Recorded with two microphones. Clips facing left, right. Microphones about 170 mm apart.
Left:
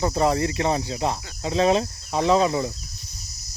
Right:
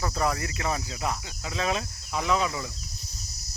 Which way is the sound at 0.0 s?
25° left (ahead or behind).